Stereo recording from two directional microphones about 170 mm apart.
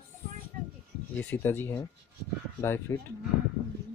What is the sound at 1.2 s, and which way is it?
Speech, 10° left (ahead or behind).